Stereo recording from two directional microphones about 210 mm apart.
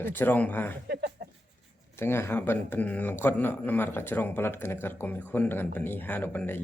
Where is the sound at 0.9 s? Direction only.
50° right (ahead or behind).